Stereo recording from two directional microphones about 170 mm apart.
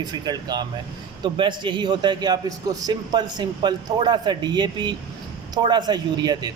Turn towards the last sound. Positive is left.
turn(degrees=-25)  # may be behind; listen again after turning